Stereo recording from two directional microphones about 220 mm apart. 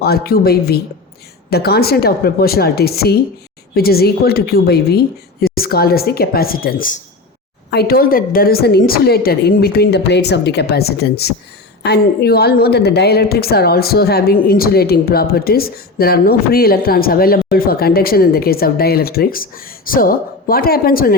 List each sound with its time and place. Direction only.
0.0 s a woman's voice: 45° left (ahead or behind)